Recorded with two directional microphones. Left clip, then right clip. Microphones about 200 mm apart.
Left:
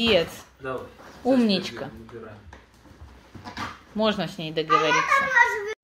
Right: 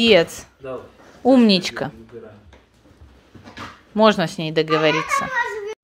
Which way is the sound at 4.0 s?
45° right (ahead or behind).